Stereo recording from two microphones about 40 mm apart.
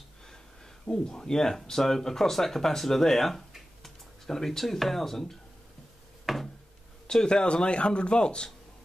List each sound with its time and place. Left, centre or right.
0.8 s speech: centre
6.2 s a sound: centre
7.1 s a man's voice: centre